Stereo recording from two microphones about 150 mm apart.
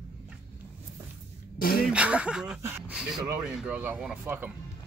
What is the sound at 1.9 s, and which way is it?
Speech, 5° right (ahead or behind).